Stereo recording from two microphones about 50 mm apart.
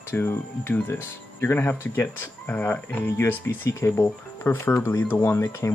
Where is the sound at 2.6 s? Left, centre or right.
Left.